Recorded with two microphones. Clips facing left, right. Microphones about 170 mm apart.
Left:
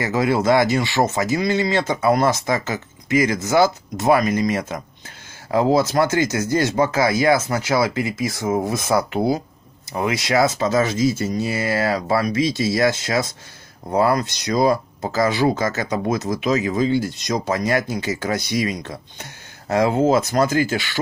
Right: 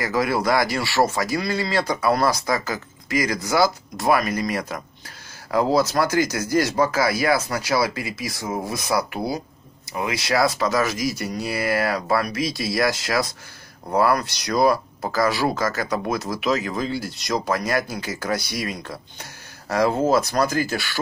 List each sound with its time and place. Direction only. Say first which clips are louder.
0.0 s speech: left 3 dB; 25° left (ahead or behind)